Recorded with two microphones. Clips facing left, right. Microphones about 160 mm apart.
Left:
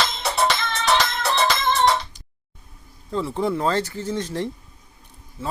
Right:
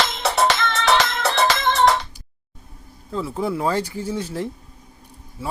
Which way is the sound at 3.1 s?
5° right (ahead or behind).